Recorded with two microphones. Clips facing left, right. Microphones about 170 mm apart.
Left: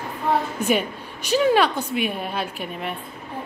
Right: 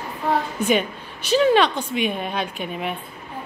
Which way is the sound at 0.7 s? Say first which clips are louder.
Right 1 dB; 10° left (ahead or behind).